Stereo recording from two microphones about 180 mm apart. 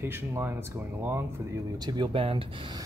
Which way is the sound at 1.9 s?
30° right (ahead or behind).